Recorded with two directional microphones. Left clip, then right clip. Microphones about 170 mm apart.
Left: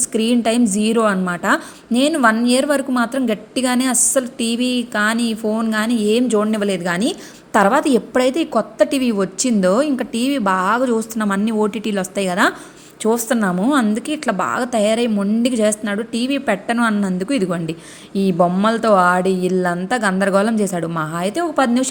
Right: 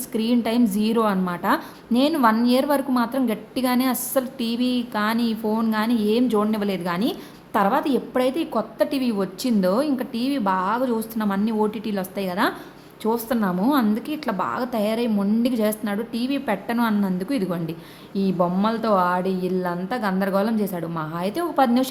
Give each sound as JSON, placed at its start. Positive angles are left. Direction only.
{"t": 0.1, "sound": "a woman's voice", "side_deg": 15}